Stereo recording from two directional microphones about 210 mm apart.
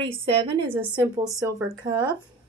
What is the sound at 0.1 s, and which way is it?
Speech, 25° right (ahead or behind).